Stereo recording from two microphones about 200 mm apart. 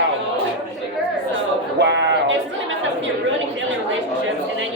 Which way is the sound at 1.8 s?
60° right (ahead or behind).